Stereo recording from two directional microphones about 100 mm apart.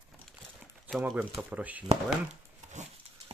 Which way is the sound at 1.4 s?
15° right (ahead or behind).